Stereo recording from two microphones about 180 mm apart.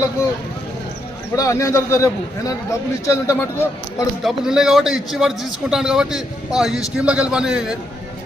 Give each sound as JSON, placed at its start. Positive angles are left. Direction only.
{"t": 1.4, "sound": "a man's voice", "side_deg": 15}
{"t": 4.2, "sound": "a man's voice", "side_deg": 0}